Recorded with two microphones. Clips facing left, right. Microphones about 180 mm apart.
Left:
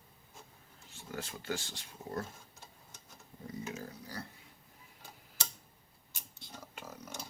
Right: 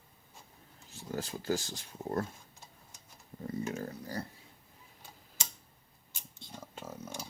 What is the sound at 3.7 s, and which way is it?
Speech, 50° right (ahead or behind).